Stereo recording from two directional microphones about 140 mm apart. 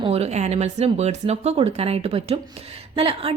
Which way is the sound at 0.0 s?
50° right (ahead or behind).